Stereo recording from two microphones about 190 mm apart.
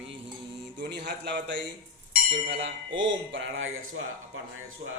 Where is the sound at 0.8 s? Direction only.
65° right (ahead or behind).